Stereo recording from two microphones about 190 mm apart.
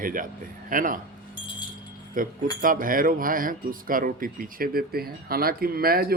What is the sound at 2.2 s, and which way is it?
Speech, 45° right (ahead or behind).